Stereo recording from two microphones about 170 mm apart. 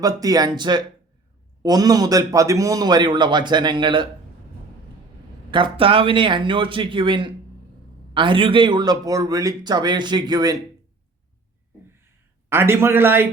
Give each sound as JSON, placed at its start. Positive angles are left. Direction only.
{"t": 0.0, "sound": "a man's voice", "side_deg": -20}
{"t": 5.5, "sound": "a man's voice", "side_deg": -30}
{"t": 12.5, "sound": "a man's voice", "side_deg": -15}